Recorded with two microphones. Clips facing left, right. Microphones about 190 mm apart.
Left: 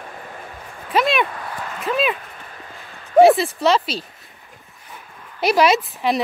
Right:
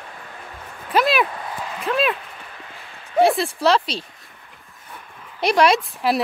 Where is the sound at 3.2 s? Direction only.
Centre (ahead or behind).